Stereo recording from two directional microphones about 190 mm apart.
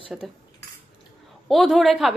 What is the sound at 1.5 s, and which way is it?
Speech, centre (ahead or behind).